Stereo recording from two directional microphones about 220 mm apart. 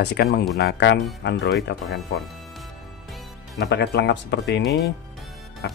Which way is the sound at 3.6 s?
50° left (ahead or behind).